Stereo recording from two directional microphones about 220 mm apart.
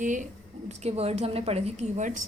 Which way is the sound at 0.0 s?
35° right (ahead or behind).